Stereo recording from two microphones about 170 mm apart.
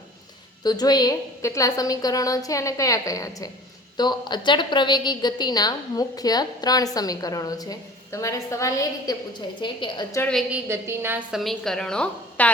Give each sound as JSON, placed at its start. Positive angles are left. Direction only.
{"t": 0.6, "sound": "a woman's voice", "side_deg": 25}
{"t": 10.2, "sound": "a woman's voice", "side_deg": 5}
{"t": 10.5, "sound": "a woman's voice", "side_deg": -15}
{"t": 11.3, "sound": "a woman's voice", "side_deg": 0}